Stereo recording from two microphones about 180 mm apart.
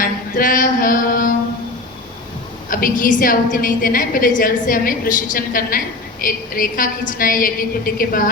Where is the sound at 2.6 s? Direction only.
50° left (ahead or behind).